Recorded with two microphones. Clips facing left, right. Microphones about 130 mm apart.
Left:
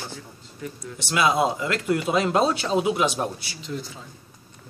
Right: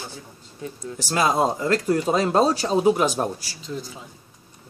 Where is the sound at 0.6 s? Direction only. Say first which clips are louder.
Right 3 dB; 40° right (ahead or behind).